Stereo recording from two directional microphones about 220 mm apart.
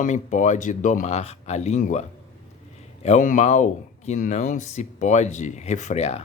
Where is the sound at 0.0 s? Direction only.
35° left (ahead or behind).